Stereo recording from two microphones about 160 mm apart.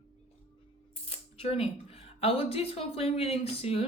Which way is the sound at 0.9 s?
40° left (ahead or behind).